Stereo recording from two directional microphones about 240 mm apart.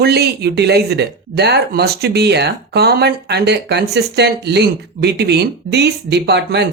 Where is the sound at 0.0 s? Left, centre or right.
Right.